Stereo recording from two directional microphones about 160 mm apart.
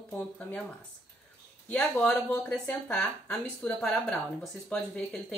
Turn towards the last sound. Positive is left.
turn(degrees=5)  # may be behind; listen again after turning